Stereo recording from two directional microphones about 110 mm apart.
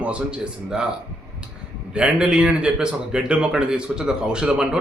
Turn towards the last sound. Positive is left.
turn(degrees=-5)  # may be behind; listen again after turning